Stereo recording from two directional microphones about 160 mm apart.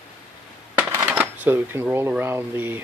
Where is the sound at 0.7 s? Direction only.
10° right (ahead or behind).